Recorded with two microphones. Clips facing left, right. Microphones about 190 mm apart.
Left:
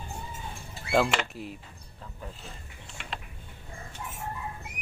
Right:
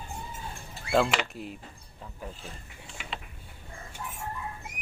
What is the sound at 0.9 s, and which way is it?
Speech, centre (ahead or behind).